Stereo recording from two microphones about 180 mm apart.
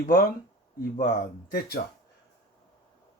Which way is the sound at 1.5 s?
55° left (ahead or behind).